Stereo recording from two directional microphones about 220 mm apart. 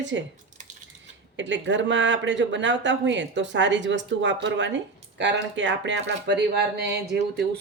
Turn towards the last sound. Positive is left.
turn(degrees=-50)  # may be behind; listen again after turning